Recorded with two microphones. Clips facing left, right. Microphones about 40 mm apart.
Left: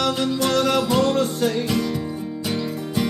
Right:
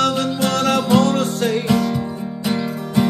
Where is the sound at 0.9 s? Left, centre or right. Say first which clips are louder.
Right 3 dB; right.